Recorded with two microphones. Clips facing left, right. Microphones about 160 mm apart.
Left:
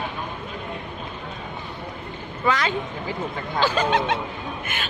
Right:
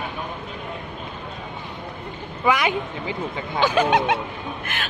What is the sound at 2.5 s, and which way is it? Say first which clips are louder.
Speech: right 2 dB; 15° right (ahead or behind).